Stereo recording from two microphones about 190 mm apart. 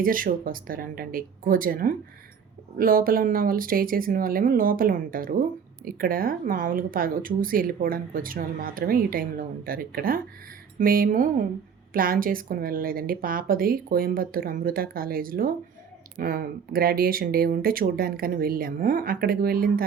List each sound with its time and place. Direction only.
0.0 s speech: 45° right (ahead or behind)